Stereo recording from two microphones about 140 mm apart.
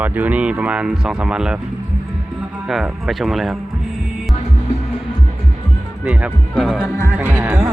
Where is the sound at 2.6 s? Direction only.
Centre (ahead or behind).